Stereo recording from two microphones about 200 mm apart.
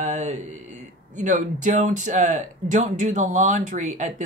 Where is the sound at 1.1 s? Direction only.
40° right (ahead or behind).